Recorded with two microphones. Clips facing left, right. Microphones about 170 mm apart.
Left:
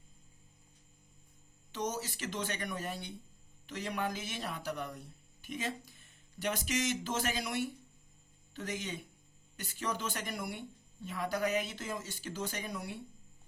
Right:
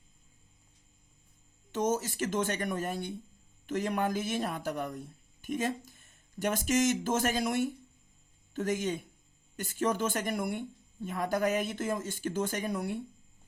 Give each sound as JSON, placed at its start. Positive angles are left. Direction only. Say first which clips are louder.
{"t": 1.7, "sound": "speech", "louder": "right 7 dB", "side_deg": -50}